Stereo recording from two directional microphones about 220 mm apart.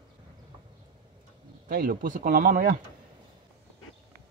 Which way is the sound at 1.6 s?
40° right (ahead or behind).